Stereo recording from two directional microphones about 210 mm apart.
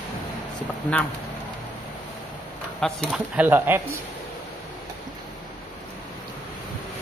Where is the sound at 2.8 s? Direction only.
Centre (ahead or behind).